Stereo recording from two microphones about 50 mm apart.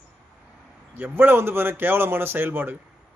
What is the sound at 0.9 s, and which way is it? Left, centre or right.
Speech, right.